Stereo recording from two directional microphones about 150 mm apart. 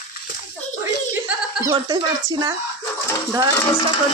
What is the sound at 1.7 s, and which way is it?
Speech, 30° right (ahead or behind).